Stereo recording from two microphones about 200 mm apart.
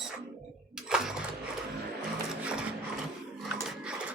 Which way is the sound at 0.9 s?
5° right (ahead or behind).